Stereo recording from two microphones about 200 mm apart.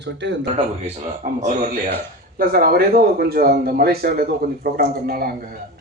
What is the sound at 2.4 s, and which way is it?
Speech, 50° right (ahead or behind).